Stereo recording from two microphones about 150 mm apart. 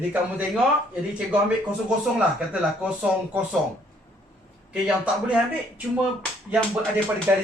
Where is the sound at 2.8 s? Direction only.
10° right (ahead or behind).